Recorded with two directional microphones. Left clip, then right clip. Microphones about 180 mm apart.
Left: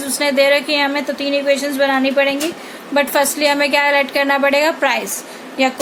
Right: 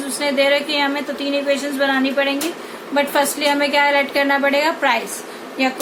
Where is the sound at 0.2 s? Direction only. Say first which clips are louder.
Left 3 dB; 55° left (ahead or behind).